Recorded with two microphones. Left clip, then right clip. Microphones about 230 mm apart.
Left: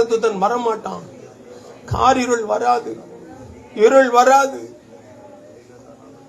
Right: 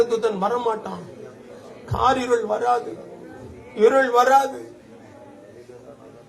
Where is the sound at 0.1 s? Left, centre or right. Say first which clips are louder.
Left 4 dB; left.